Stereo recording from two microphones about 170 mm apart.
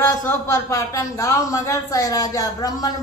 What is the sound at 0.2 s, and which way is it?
A man's voice, 15° left (ahead or behind).